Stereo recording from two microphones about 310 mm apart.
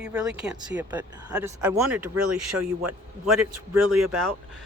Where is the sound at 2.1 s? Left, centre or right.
Right.